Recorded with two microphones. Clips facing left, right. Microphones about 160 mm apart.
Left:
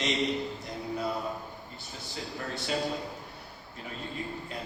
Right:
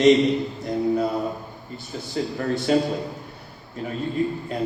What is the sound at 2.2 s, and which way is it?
Speech, 55° right (ahead or behind).